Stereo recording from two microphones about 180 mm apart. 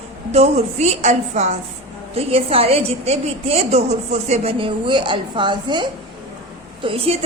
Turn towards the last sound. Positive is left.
turn(degrees=-30)  # may be behind; listen again after turning